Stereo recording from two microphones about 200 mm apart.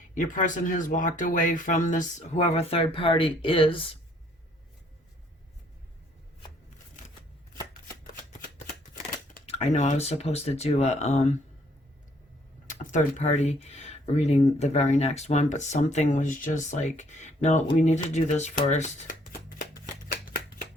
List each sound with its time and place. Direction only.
0.1 s speech: 40° left (ahead or behind)
9.5 s speech: 35° left (ahead or behind)
12.6 s speech: 40° left (ahead or behind)